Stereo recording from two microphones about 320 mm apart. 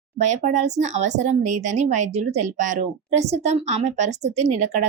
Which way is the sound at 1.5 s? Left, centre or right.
Right.